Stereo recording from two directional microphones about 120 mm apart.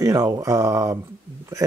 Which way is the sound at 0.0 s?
30° right (ahead or behind).